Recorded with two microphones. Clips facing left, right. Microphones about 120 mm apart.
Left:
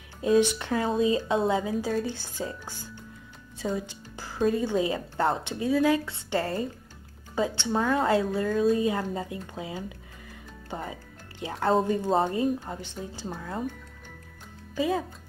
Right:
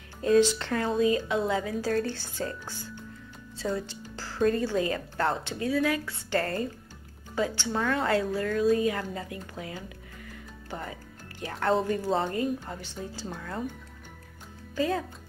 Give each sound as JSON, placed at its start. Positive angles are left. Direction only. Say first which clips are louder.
{"t": 0.2, "sound": "speech", "louder": "even", "side_deg": 15}
{"t": 3.5, "sound": "music", "louder": "even", "side_deg": 15}
{"t": 4.4, "sound": "speech", "louder": "even", "side_deg": 5}
{"t": 4.6, "sound": "speech", "louder": "left 1 dB", "side_deg": 20}
{"t": 6.4, "sound": "speech", "louder": "left 1 dB", "side_deg": 10}
{"t": 7.3, "sound": "speech", "louder": "left 2 dB", "side_deg": 20}
{"t": 10.7, "sound": "music", "louder": "left 2 dB", "side_deg": 20}
{"t": 11.8, "sound": "speech", "louder": "left 3 dB", "side_deg": 25}
{"t": 14.8, "sound": "speech", "louder": "left 1 dB", "side_deg": 15}